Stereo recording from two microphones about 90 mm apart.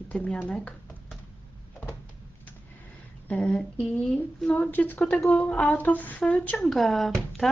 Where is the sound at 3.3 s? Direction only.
15° left (ahead or behind).